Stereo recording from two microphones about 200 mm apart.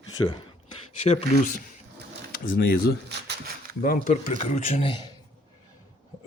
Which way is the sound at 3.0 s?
55° right (ahead or behind).